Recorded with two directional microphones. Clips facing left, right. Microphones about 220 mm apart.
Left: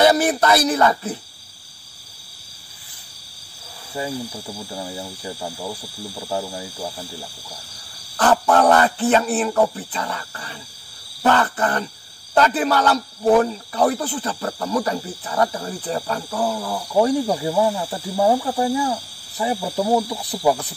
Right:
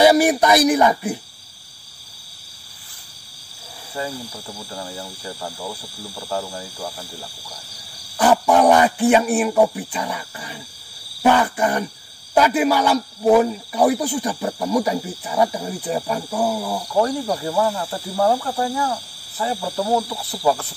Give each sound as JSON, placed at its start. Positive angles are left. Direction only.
{"t": 0.0, "sound": "a man's voice", "side_deg": -10}
{"t": 4.0, "sound": "speech", "side_deg": 20}
{"t": 8.2, "sound": "a man's voice", "side_deg": -10}
{"t": 16.9, "sound": "speech", "side_deg": 20}